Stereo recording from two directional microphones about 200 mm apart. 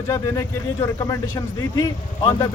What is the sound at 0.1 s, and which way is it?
Speech, 15° left (ahead or behind).